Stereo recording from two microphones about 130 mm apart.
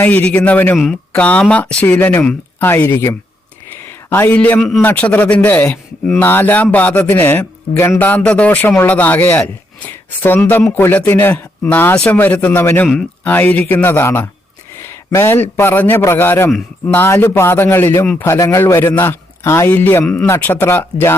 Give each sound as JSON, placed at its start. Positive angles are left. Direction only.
{"t": 0.0, "sound": "speech", "side_deg": 10}
{"t": 12.9, "sound": "speech", "side_deg": 5}
{"t": 18.0, "sound": "speech", "side_deg": 5}
{"t": 18.3, "sound": "speech", "side_deg": 25}